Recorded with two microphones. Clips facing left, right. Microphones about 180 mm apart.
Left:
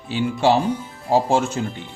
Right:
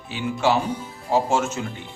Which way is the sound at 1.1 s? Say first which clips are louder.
Left 3 dB; 30° left (ahead or behind).